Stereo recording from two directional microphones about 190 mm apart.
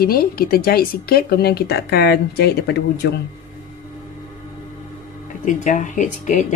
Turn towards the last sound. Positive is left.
turn(degrees=40)  # may be behind; listen again after turning